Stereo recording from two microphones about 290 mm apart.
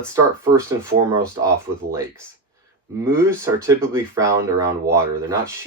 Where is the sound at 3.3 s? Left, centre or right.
Centre.